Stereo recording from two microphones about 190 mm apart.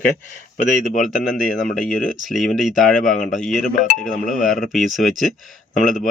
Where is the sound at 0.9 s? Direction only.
45° left (ahead or behind).